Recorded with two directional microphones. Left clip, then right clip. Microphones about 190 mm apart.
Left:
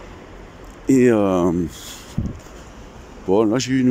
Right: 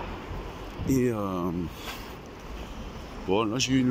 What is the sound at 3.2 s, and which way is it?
Speech, 40° left (ahead or behind).